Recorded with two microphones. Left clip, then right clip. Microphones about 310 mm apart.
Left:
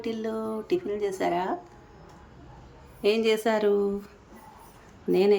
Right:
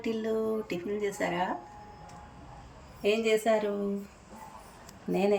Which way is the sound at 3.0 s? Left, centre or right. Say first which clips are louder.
Left 3 dB; centre.